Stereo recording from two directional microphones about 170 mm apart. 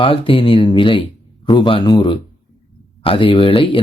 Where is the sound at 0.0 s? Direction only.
30° left (ahead or behind).